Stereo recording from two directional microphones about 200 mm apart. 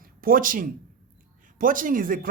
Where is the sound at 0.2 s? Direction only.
45° right (ahead or behind).